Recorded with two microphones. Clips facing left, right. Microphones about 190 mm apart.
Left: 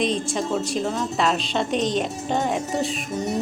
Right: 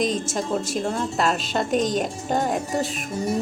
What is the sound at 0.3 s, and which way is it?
A woman's voice, centre (ahead or behind).